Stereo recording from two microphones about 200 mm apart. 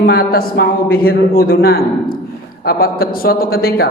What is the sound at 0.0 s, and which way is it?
A man's voice, 50° left (ahead or behind).